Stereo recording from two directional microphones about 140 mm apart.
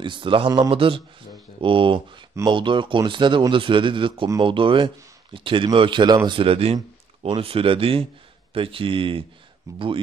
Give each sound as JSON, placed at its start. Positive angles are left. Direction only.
{"t": 0.0, "sound": "speech", "side_deg": -35}
{"t": 9.7, "sound": "speech", "side_deg": -25}